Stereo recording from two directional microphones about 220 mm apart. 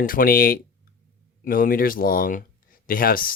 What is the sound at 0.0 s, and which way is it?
Speech, 40° left (ahead or behind).